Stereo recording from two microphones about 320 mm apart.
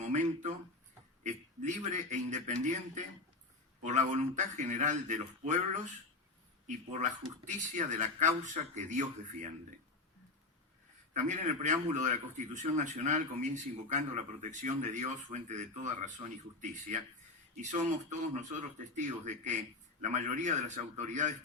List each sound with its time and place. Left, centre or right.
0.0 s a man's voice: right
11.1 s a man's voice: right